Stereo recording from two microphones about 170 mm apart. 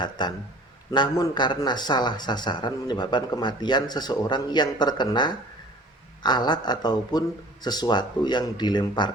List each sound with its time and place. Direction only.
0.0 s a man's voice: 25° left (ahead or behind)